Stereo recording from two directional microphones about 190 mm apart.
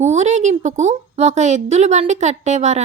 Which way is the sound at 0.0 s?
35° right (ahead or behind).